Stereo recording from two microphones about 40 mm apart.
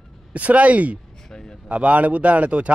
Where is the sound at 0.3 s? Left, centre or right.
Right.